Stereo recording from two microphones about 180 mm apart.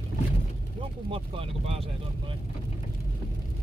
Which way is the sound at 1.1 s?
30° right (ahead or behind).